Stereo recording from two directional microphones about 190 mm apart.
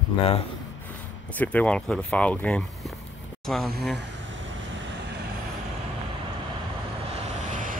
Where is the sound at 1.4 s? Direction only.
5° left (ahead or behind).